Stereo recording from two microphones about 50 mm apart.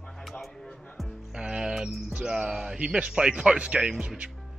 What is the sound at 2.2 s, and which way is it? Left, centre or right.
Speech, centre.